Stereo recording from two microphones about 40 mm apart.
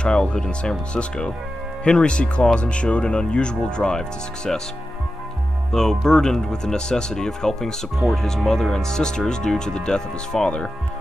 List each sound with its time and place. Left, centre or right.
0.0 s speech: left
4.5 s speech: centre
5.7 s speech: centre